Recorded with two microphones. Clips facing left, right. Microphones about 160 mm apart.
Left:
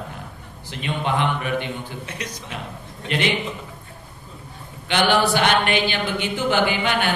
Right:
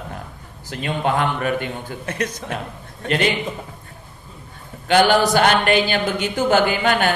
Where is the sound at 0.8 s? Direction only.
45° right (ahead or behind).